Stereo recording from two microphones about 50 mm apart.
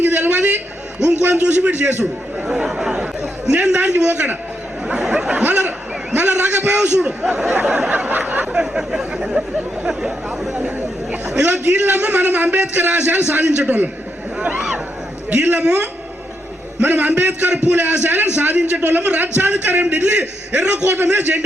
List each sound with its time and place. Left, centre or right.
0.0 s a sound: right
1.5 s a man's voice: right
2.6 s speech: centre
2.9 s chatter: centre
3.5 s a man's voice: right
5.0 s speech: right
5.4 s a man's voice: right
6.7 s a man's voice: right
8.5 s speech: centre
11.4 s a man's voice: right
13.4 s a man's voice: right
16.8 s a man's voice: right
20.8 s a man's voice: right